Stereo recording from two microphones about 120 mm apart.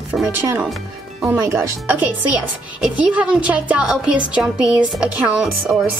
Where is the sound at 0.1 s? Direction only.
10° right (ahead or behind).